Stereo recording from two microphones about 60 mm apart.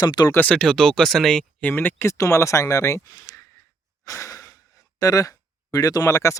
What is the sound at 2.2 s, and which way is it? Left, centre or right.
Speech, left.